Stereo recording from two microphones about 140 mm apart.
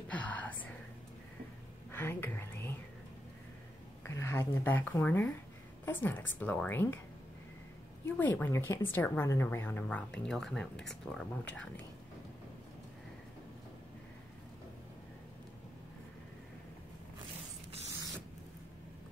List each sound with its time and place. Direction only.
0.1 s whispering: 10° left (ahead or behind)
1.9 s whispering: 15° left (ahead or behind)
4.1 s a woman's voice: 20° left (ahead or behind)
8.2 s a woman's voice: 15° left (ahead or behind)